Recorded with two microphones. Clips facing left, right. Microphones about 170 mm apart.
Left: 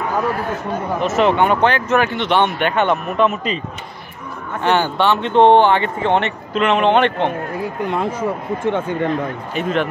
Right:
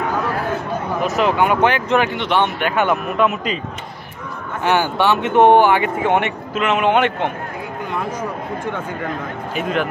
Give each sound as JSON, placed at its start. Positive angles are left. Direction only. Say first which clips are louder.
{"t": 1.0, "sound": "speech", "louder": "left 2 dB", "side_deg": 0}
{"t": 2.2, "sound": "speech", "louder": "left 2 dB", "side_deg": -5}
{"t": 4.6, "sound": "speech", "louder": "even", "side_deg": -10}
{"t": 7.9, "sound": "speech", "louder": "left 2 dB", "side_deg": 25}
{"t": 9.6, "sound": "speech", "louder": "left 2 dB", "side_deg": 0}